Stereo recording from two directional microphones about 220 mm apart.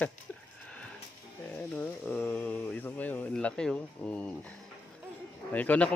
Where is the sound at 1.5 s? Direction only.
5° left (ahead or behind).